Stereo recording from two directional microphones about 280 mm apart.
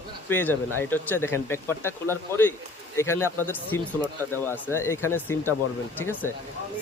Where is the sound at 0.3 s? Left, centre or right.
Centre.